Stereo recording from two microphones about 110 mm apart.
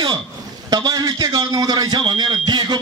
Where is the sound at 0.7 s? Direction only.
40° right (ahead or behind).